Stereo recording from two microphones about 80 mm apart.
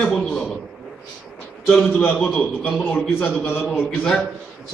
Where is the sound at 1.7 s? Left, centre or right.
Left.